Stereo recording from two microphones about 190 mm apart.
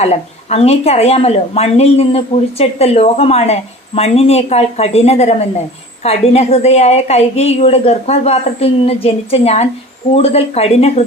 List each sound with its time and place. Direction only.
0.0 s a woman's voice: 35° left (ahead or behind)